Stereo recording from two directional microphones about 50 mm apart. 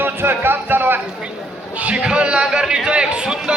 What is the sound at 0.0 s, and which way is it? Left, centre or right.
Speech, right.